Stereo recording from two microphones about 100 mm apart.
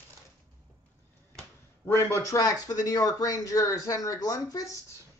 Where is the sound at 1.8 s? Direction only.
25° left (ahead or behind).